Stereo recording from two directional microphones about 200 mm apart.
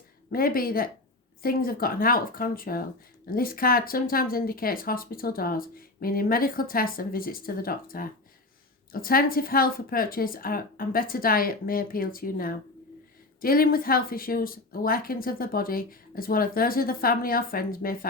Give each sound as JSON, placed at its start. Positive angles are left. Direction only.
{"t": 0.3, "sound": "speech", "side_deg": 45}